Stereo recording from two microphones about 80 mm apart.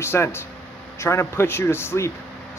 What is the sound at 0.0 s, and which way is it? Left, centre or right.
A man's voice, left.